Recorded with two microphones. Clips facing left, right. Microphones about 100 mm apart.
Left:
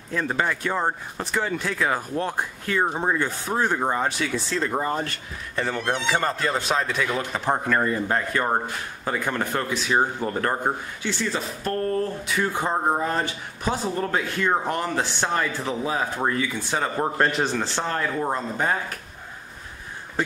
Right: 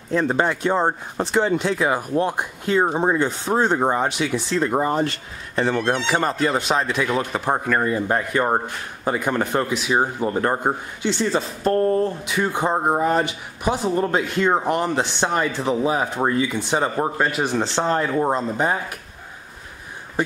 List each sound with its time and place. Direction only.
0.1 s speech: 25° right (ahead or behind)
17.2 s a man's voice: 5° right (ahead or behind)
17.5 s speech: 20° right (ahead or behind)